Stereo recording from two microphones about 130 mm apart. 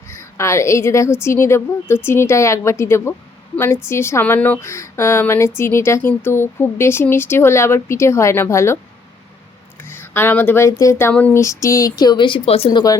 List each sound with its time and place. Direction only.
0.1 s speech: 20° left (ahead or behind)
9.8 s speech: 15° left (ahead or behind)
11.1 s a sound: 10° left (ahead or behind)
11.3 s speech: 25° left (ahead or behind); by 12.8 s 50° left (ahead or behind)